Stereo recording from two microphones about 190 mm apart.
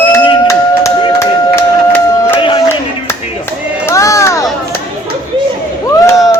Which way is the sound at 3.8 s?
15° left (ahead or behind).